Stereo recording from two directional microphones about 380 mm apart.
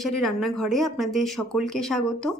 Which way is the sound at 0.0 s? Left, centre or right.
Centre.